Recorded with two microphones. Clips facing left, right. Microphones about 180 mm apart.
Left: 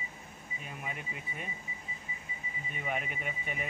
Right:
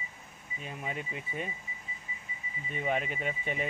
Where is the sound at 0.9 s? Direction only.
30° right (ahead or behind).